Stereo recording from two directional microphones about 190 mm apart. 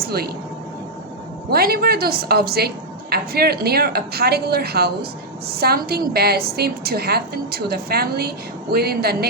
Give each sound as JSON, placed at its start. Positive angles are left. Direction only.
{"t": 0.0, "sound": "speech", "side_deg": -55}
{"t": 1.5, "sound": "a woman's voice", "side_deg": -55}